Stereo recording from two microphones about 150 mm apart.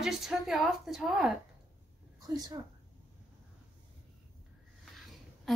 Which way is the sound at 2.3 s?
30° right (ahead or behind).